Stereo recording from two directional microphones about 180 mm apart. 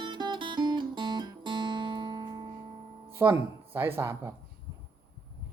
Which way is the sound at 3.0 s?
15° right (ahead or behind).